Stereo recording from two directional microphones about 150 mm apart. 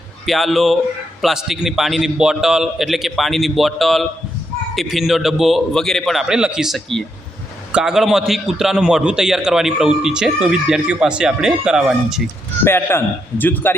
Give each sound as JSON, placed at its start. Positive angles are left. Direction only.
{"t": 0.3, "sound": "a man's voice", "side_deg": 0}
{"t": 12.6, "sound": "a man's voice", "side_deg": 15}